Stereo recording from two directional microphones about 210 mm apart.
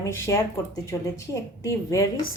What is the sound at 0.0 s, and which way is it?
A woman's voice, 15° left (ahead or behind).